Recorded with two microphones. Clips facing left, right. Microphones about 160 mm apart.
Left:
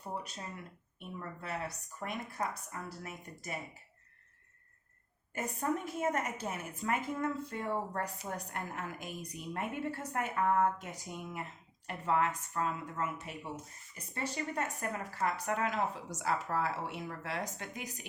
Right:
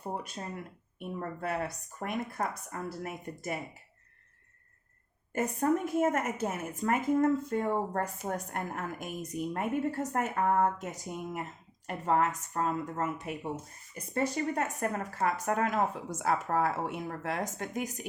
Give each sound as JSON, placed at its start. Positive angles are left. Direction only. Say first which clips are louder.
{"t": 0.1, "sound": "a woman's voice", "louder": "right 4 dB", "side_deg": -50}
{"t": 5.3, "sound": "a woman's voice", "louder": "right 7 dB", "side_deg": -50}
{"t": 14.1, "sound": "a woman's voice", "louder": "right 7 dB", "side_deg": -45}